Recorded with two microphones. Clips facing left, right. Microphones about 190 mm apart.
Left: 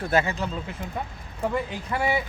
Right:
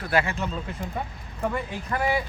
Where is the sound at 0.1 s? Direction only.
20° left (ahead or behind).